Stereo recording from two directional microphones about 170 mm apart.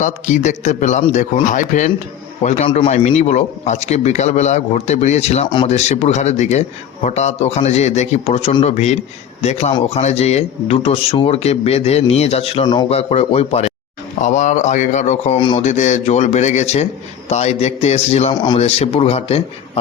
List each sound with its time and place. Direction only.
0.0 s speech: 45° left (ahead or behind)
15.4 s a man's voice: 30° left (ahead or behind)
15.6 s speech: 45° left (ahead or behind)
18.3 s a man's voice: 25° left (ahead or behind)
18.6 s speech: 35° left (ahead or behind)